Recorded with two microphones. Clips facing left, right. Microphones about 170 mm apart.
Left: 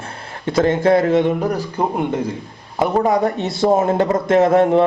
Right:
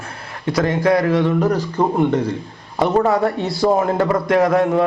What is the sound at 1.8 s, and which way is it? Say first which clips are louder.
A man's voice: right 4 dB; 10° left (ahead or behind).